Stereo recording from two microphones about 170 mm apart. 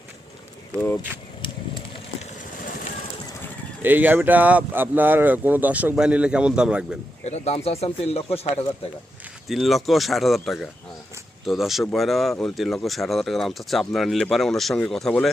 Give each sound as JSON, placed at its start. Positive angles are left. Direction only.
{"t": 3.8, "sound": "speech", "side_deg": -10}
{"t": 7.3, "sound": "speech", "side_deg": 40}
{"t": 9.5, "sound": "speech", "side_deg": 0}